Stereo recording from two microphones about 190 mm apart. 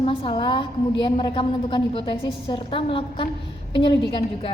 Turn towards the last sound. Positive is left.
turn(degrees=25)  # may be behind; listen again after turning